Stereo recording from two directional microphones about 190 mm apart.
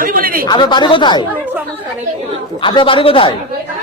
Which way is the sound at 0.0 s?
50° right (ahead or behind).